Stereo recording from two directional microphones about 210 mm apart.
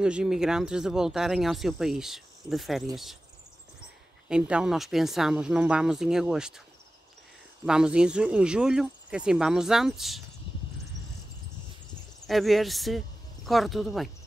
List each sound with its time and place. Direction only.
0.0 s speech: 5° right (ahead or behind)
4.3 s speech: 5° right (ahead or behind)
7.6 s speech: 5° right (ahead or behind)
12.3 s speech: centre (ahead or behind)